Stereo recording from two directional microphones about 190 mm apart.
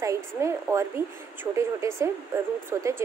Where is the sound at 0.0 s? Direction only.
15° right (ahead or behind).